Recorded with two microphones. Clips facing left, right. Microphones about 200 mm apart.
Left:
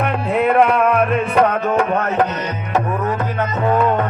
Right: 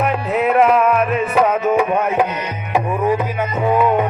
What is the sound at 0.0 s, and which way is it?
Music, centre (ahead or behind).